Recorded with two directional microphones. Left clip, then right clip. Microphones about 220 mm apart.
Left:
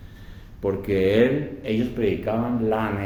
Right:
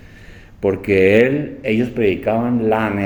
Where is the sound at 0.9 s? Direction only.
45° right (ahead or behind).